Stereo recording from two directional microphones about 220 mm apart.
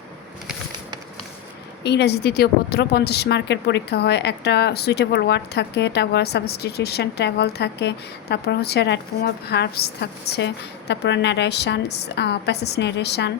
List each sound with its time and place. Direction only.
1.8 s a woman's voice: 50° left (ahead or behind)